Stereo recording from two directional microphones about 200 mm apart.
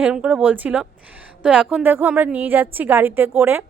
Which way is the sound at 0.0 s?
5° right (ahead or behind).